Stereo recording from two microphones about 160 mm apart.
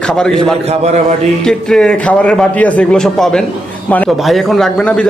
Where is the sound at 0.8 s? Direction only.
45° right (ahead or behind).